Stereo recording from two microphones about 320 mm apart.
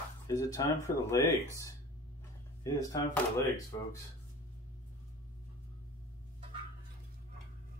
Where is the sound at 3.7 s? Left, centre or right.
Centre.